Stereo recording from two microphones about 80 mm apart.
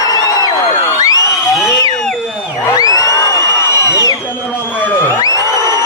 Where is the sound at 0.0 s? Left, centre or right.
Left.